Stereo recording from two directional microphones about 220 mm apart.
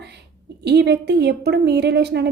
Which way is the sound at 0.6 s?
50° right (ahead or behind).